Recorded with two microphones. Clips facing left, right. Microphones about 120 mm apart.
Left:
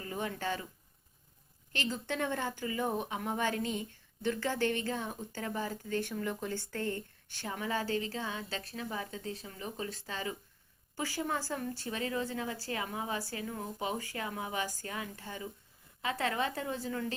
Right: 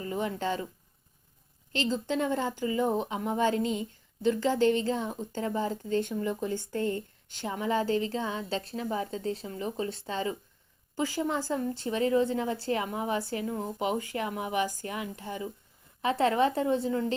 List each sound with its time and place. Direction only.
0.0 s a woman's voice: 25° right (ahead or behind)
1.8 s a woman's voice: 20° right (ahead or behind)